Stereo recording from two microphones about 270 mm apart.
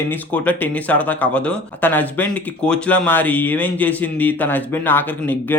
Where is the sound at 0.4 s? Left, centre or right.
Centre.